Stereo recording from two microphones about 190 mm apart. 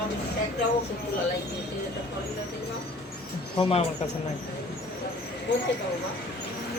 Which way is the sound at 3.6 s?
30° left (ahead or behind).